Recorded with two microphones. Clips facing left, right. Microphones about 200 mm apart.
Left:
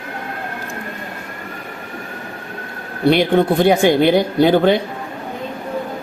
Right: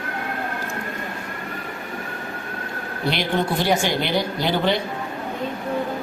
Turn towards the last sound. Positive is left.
turn(degrees=50)  # may be behind; listen again after turning